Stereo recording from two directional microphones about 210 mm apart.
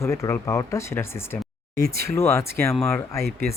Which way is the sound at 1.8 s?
45° right (ahead or behind).